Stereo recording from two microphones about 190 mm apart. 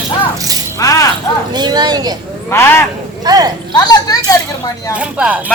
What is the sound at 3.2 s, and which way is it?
Speech, 20° right (ahead or behind).